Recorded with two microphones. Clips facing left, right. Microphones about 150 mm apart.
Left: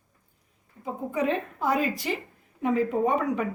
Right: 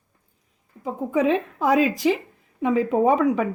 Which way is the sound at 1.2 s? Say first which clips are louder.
Right 6 dB; 90° right.